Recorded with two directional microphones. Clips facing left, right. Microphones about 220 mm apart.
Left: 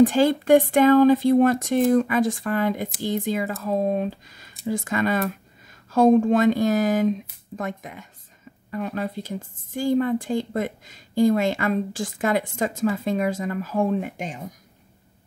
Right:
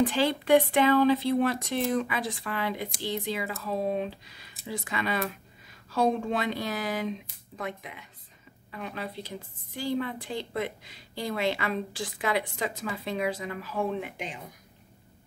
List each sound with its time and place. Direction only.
0.0 s a woman's voice: 45° left (ahead or behind)